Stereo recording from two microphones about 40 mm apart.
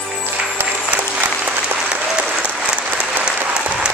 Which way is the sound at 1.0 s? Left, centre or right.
Right.